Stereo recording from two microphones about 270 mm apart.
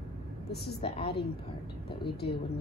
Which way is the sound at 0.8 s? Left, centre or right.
Left.